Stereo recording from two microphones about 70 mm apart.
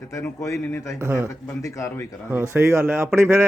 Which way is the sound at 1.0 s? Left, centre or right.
Right.